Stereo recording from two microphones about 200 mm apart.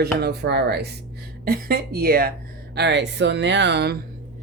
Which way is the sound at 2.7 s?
60° right (ahead or behind).